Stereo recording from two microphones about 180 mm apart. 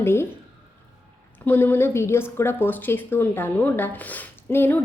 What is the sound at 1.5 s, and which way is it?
A woman's voice, 10° left (ahead or behind).